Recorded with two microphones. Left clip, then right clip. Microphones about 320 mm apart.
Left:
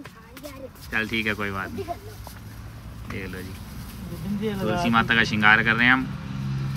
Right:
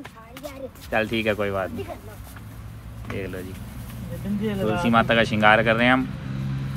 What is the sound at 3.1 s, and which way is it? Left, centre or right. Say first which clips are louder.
Speech: right 3 dB; centre.